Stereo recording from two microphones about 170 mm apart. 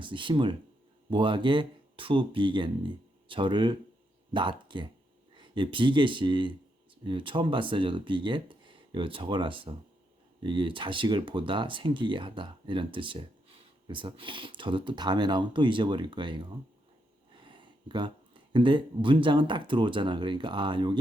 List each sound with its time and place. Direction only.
0.0 s speech: 30° right (ahead or behind)